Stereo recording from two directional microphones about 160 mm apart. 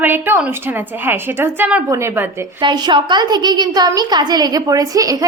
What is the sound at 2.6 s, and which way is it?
A woman's voice, 30° right (ahead or behind).